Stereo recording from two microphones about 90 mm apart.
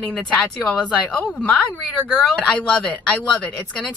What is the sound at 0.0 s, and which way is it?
A woman's voice, 15° left (ahead or behind).